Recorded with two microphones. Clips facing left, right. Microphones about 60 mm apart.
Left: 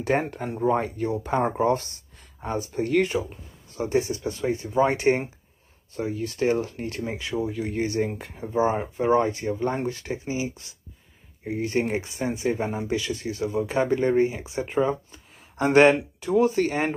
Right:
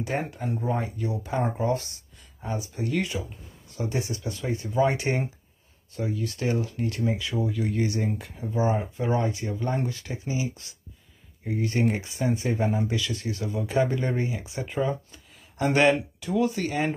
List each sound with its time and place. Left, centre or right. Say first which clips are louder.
0.0 s speech: left 5 dB; left